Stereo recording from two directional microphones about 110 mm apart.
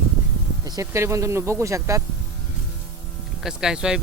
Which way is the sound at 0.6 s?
30° right (ahead or behind).